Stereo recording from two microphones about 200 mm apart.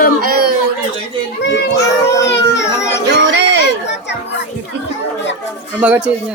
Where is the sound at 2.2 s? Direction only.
60° left (ahead or behind).